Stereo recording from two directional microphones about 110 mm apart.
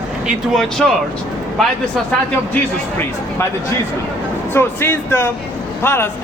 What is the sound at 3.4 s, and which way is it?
Speech, 20° left (ahead or behind).